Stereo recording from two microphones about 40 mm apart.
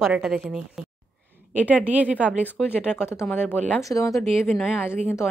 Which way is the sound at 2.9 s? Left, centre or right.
Left.